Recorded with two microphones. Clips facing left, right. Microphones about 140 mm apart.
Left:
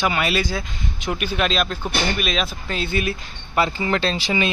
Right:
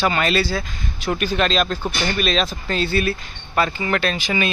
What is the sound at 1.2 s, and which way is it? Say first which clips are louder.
Speech: right 2 dB; 10° left (ahead or behind).